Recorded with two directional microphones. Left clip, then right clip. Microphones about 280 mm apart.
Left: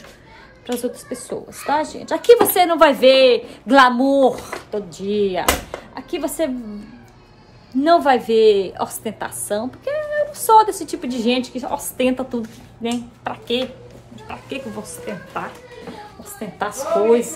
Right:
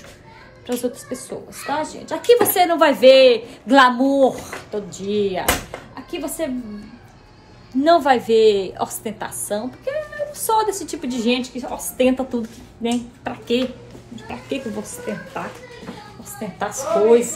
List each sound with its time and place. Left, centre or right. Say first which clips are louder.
0.7 s a woman's voice: even; centre
7.8 s a woman's voice: even; centre
14.3 s a woman's voice: right 2 dB; left
16.3 s a woman's voice: left 1 dB; centre